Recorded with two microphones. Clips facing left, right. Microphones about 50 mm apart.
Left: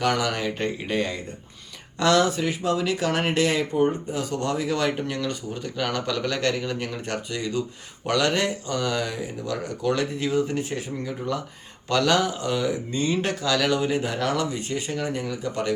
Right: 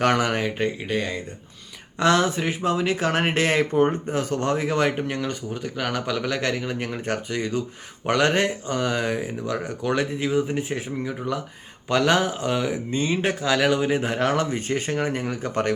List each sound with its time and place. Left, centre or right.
0.0 s speech: right
0.4 s speech: centre
2.0 s speech: right
5.6 s speech: centre; by 15.7 s right